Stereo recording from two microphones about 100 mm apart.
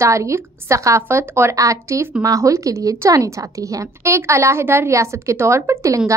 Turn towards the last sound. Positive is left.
turn(degrees=-30)  # may be behind; listen again after turning